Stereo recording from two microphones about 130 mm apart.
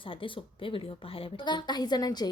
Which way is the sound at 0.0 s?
40° left (ahead or behind).